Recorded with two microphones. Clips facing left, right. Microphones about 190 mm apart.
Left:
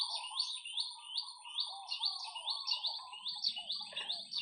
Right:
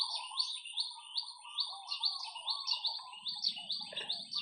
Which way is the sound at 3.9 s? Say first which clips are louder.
Right 7 dB; 40° right (ahead or behind).